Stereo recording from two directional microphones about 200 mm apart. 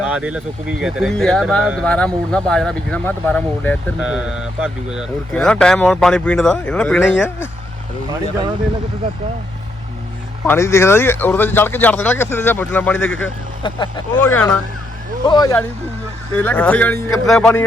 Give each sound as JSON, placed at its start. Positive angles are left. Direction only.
{"t": 0.0, "sound": "speech", "side_deg": -5}
{"t": 4.0, "sound": "speech", "side_deg": -5}
{"t": 10.4, "sound": "speech", "side_deg": 10}
{"t": 13.6, "sound": "speech", "side_deg": 25}
{"t": 14.2, "sound": "speech", "side_deg": 5}
{"t": 15.3, "sound": "speech", "side_deg": 20}